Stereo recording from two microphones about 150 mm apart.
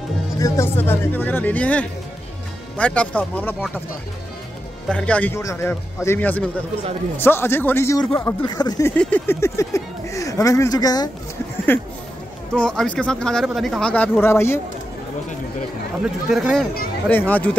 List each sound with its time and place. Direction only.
0.4 s speech: 15° left (ahead or behind)
4.8 s speech: 5° left (ahead or behind)
8.5 s speech: 25° left (ahead or behind)
8.9 s speech: 10° left (ahead or behind); by 11.1 s 25° left (ahead or behind)
11.7 s speech: 15° left (ahead or behind)
16.3 s speech: centre (ahead or behind)